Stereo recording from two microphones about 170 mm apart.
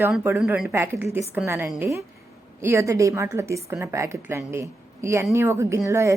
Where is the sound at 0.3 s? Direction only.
5° right (ahead or behind).